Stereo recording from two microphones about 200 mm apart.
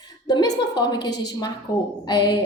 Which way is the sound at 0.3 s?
20° left (ahead or behind).